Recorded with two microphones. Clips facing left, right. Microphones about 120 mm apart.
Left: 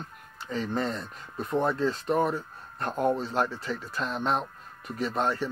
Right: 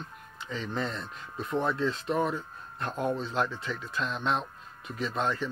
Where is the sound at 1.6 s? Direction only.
35° left (ahead or behind).